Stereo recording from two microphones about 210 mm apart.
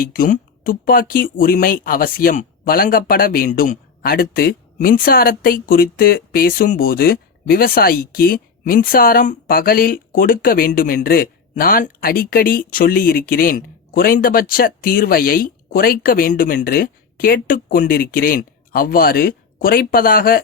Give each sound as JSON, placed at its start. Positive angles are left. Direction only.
{"t": 0.0, "sound": "speech", "side_deg": 40}